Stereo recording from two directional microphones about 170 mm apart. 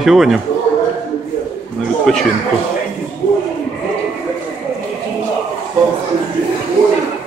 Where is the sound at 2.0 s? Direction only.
Centre (ahead or behind).